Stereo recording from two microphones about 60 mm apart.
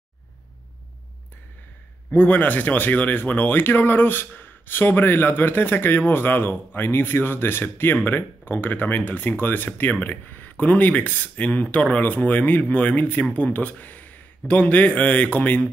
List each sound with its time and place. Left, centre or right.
2.0 s speech: left